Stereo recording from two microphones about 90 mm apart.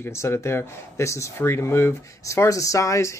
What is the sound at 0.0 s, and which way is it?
Speech, 30° left (ahead or behind).